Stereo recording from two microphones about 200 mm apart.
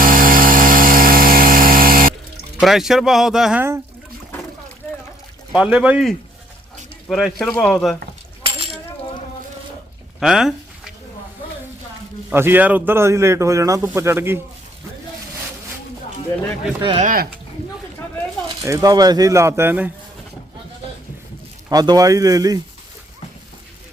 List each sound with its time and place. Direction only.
0.0 s power tool: 45° right (ahead or behind)
2.6 s speech: centre (ahead or behind)
5.5 s speech: 5° right (ahead or behind)
8.4 s coin: 30° right (ahead or behind)
10.2 s speech: centre (ahead or behind)
12.3 s a man's voice: 10° right (ahead or behind)
17.0 s speech: 45° right (ahead or behind)
18.6 s a man's voice: 15° right (ahead or behind)
21.7 s a man's voice: 20° right (ahead or behind)